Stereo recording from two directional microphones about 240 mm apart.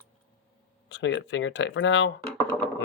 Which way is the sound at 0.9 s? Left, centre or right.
Left.